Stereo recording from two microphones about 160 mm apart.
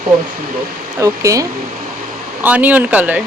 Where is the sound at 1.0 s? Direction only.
20° right (ahead or behind).